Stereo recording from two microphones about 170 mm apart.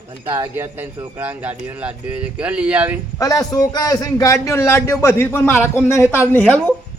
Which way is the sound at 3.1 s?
20° left (ahead or behind).